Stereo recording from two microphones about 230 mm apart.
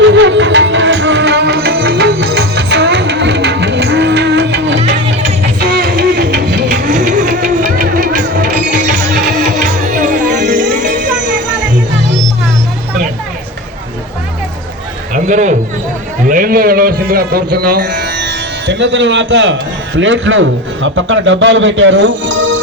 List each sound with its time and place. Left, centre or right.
0.1 s music: right
15.1 s a sound: right
16.2 s music: right
20.0 s a man's voice: right